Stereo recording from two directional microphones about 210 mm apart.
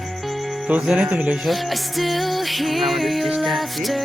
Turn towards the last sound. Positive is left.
turn(degrees=0)  # may be behind; listen again after turning